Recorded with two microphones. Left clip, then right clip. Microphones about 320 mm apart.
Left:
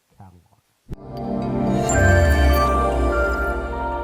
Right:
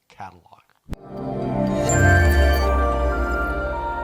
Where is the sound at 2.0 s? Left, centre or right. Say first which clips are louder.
Even; centre.